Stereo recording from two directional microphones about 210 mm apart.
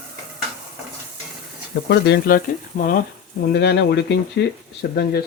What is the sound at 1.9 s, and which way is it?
Speech, 50° left (ahead or behind).